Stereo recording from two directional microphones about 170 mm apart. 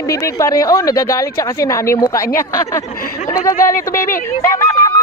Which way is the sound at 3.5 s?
55° left (ahead or behind).